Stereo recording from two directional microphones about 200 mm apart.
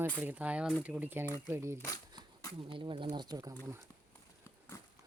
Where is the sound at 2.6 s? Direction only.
25° right (ahead or behind).